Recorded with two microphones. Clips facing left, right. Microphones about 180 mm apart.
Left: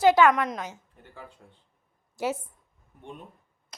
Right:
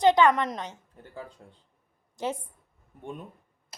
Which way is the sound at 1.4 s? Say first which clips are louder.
Right 3 dB; 40° right (ahead or behind).